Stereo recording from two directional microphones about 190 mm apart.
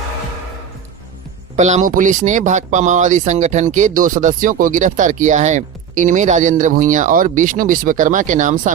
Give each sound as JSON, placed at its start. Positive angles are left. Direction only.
{"t": 1.5, "sound": "speech", "side_deg": -40}